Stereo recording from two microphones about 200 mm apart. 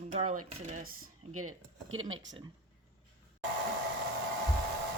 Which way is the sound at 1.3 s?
90° right.